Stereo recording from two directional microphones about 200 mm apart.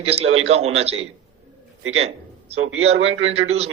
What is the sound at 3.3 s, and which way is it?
Speech, 30° right (ahead or behind).